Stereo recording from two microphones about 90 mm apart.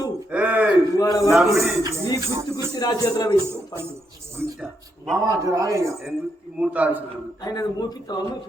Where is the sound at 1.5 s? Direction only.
30° right (ahead or behind).